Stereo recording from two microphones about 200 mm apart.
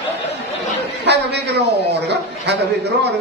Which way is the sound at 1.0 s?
60° right (ahead or behind).